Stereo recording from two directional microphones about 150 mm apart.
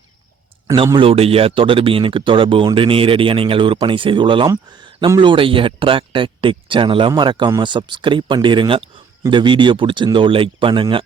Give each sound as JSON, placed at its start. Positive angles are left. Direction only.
{"t": 0.9, "sound": "speech", "side_deg": -40}